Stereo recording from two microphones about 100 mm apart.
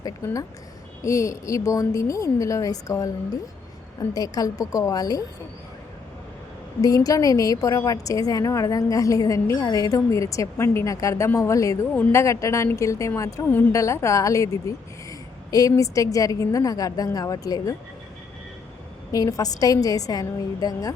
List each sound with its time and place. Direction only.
0.2 s a woman's voice: 30° left (ahead or behind)
4.1 s a woman's voice: 40° left (ahead or behind)
6.8 s a woman's voice: 40° left (ahead or behind)
19.1 s a woman's voice: 35° left (ahead or behind)